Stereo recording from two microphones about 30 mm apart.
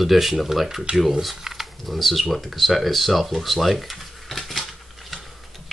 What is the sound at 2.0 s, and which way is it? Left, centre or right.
Speech, centre.